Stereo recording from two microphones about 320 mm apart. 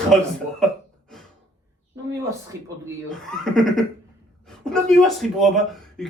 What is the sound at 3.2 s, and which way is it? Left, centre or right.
A man's voice, centre.